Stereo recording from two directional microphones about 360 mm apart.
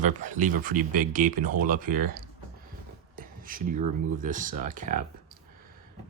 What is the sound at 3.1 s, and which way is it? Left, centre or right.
Speech, right.